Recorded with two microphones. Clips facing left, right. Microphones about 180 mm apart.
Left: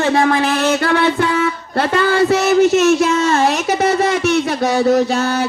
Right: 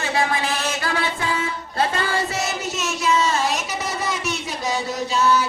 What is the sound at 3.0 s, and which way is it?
A man's voice, 50° left (ahead or behind).